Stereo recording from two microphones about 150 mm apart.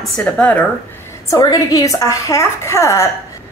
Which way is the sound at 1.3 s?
25° left (ahead or behind).